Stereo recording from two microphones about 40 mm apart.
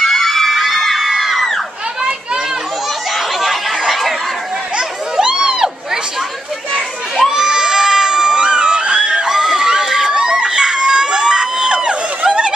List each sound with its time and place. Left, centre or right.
0.0 s crowd: centre
3.3 s snicker: centre
4.7 s a sound: right
7.2 s crowd: centre